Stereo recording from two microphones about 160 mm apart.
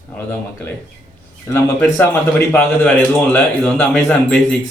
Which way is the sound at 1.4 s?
15° left (ahead or behind).